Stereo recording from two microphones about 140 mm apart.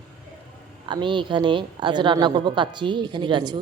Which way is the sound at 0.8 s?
35° right (ahead or behind).